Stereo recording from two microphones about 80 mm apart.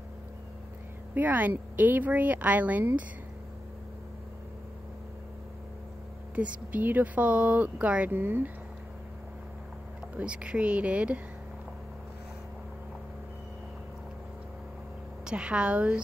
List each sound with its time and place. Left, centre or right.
1.1 s speech: right
6.3 s speech: centre
10.1 s speech: centre
15.2 s speech: centre